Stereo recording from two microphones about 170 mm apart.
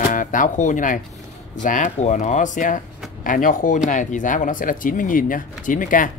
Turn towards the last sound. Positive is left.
turn(degrees=50)  # may be behind; listen again after turning